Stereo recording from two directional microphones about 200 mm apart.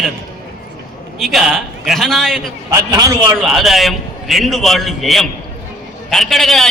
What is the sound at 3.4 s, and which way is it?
A man's voice, centre (ahead or behind).